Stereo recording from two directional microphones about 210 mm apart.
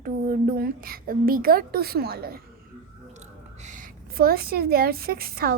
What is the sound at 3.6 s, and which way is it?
A woman's voice, 40° right (ahead or behind).